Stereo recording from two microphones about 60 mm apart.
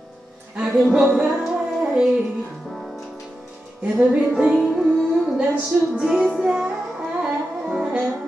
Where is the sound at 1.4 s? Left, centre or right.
Centre.